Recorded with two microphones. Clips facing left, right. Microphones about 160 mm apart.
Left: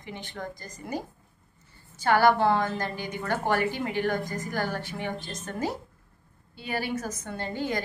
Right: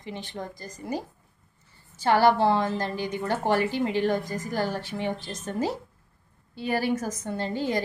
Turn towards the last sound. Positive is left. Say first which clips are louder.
# right 3 dB
turn(degrees=-30)  # may be behind; listen again after turning